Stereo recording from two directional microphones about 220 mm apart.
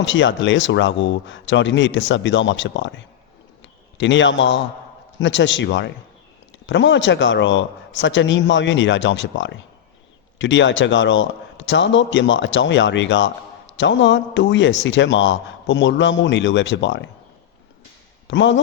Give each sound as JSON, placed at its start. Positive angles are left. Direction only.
{"t": 0.0, "sound": "a man's voice", "side_deg": 55}
{"t": 18.3, "sound": "a man's voice", "side_deg": 55}